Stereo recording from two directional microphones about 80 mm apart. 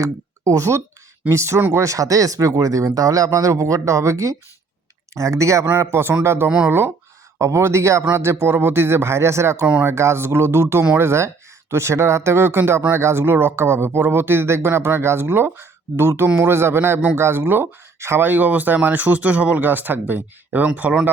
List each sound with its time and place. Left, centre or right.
0.0 s speech: right
1.8 s speech: right
7.3 s speech: right